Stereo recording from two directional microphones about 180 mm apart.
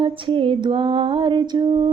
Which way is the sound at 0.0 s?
30° right (ahead or behind).